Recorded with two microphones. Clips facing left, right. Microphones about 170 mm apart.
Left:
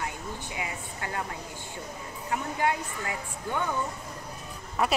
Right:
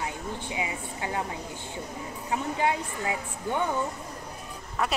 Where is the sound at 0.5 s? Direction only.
15° right (ahead or behind).